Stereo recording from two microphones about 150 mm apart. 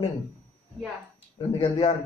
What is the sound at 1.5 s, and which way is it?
Speech, 40° left (ahead or behind).